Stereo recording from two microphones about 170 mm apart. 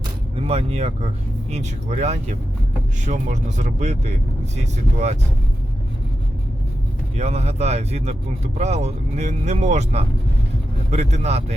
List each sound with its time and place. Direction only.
0.3 s speech: 35° right (ahead or behind)
7.2 s speech: 40° right (ahead or behind)